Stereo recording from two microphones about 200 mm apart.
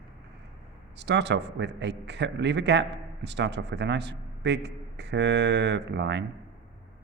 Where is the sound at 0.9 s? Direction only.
60° right (ahead or behind).